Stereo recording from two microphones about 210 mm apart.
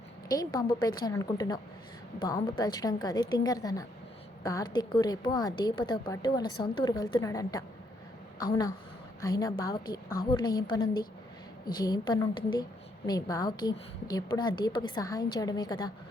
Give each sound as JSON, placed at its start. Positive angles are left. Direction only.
{"t": 0.3, "sound": "a woman's voice", "side_deg": 15}